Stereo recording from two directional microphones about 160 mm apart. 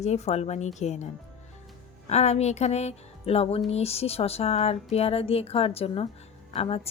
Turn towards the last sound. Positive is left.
turn(degrees=35)  # may be behind; listen again after turning